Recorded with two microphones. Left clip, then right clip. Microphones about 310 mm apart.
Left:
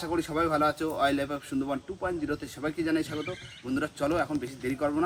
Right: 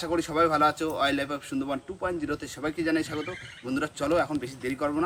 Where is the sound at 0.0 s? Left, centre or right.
Centre.